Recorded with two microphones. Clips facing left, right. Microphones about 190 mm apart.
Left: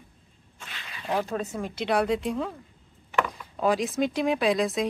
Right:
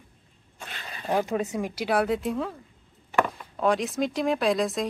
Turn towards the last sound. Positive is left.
turn(degrees=0)  # may be behind; listen again after turning